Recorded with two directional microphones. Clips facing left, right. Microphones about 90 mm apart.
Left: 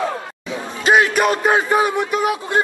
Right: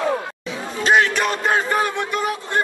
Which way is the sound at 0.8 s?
10° left (ahead or behind).